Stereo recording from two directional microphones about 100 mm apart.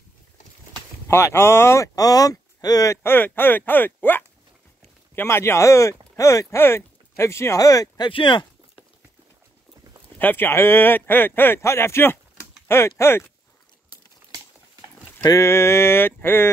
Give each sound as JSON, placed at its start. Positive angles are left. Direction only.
{"t": 1.0, "sound": "speech", "side_deg": 25}
{"t": 8.1, "sound": "speech", "side_deg": 55}
{"t": 10.1, "sound": "speech", "side_deg": 20}
{"t": 15.2, "sound": "speech", "side_deg": 30}